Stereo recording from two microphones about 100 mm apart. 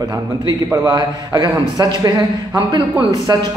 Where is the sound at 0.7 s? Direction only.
40° right (ahead or behind).